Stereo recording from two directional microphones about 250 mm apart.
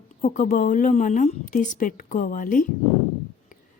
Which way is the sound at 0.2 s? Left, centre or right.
Left.